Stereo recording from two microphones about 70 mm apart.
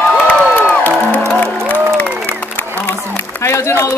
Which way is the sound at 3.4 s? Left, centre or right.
Left.